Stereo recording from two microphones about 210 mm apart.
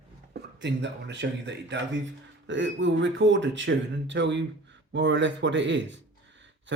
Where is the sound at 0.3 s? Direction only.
55° right (ahead or behind).